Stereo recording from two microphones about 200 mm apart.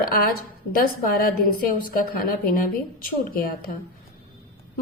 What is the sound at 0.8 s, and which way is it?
A woman's voice, 45° left (ahead or behind).